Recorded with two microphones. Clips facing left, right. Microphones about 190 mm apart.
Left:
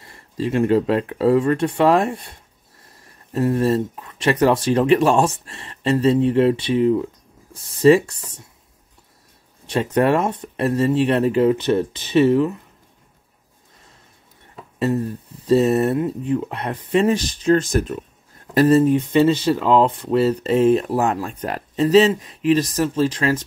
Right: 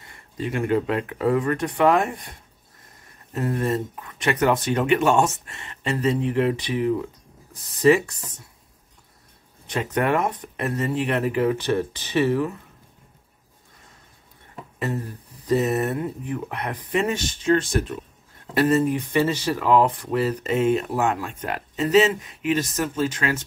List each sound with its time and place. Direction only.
0.1 s speech: 30° left (ahead or behind)
3.3 s speech: 30° left (ahead or behind)
9.7 s speech: 30° left (ahead or behind)
15.4 s speech: 30° left (ahead or behind)
18.9 s speech: 25° left (ahead or behind)